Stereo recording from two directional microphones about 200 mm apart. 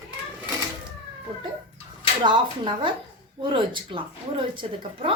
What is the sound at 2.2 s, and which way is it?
Speech, 25° right (ahead or behind).